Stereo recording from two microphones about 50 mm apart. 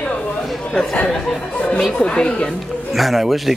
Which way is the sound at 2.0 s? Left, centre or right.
Centre.